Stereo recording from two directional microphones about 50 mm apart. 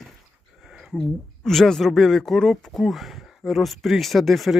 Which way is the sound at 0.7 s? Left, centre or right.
Centre.